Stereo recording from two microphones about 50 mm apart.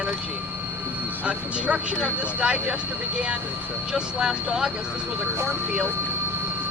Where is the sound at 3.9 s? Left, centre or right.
Centre.